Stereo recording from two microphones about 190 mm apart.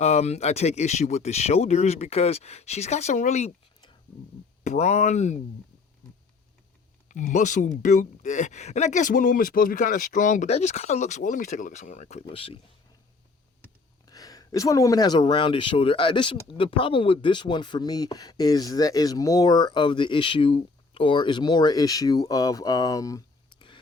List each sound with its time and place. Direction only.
0.0 s speech: 35° left (ahead or behind)
4.6 s speech: 35° left (ahead or behind)
7.1 s speech: 40° left (ahead or behind)
14.0 s speech: 20° left (ahead or behind)